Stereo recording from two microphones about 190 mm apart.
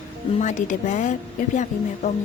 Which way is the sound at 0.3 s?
40° left (ahead or behind).